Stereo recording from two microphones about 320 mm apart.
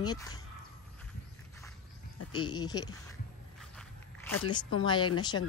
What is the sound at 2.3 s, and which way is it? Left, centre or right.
Speech, centre.